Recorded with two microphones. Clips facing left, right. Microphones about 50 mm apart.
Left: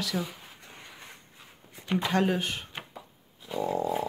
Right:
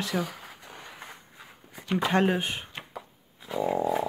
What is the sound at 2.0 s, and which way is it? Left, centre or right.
Speech, right.